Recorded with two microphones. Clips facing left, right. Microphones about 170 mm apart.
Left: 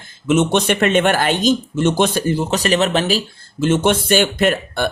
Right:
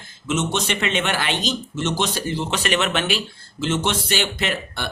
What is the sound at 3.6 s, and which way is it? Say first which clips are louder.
Speech: left 7 dB; 50° left (ahead or behind).